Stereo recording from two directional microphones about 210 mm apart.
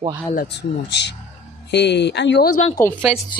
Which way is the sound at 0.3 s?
50° left (ahead or behind).